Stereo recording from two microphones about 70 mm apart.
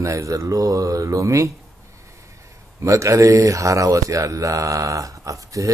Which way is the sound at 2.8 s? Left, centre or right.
Right.